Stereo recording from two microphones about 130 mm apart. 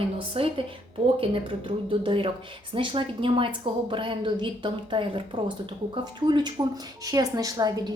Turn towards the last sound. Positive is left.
turn(degrees=-30)  # may be behind; listen again after turning